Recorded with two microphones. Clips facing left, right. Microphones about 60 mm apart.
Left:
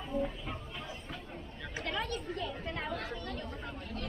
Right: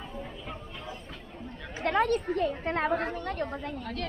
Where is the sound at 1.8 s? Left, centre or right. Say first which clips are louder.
Right 11 dB; right.